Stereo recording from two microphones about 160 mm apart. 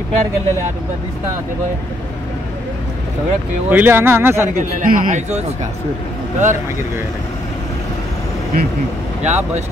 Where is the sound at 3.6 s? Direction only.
10° right (ahead or behind).